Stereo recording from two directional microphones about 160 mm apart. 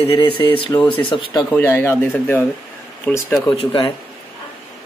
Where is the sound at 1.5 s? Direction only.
15° left (ahead or behind).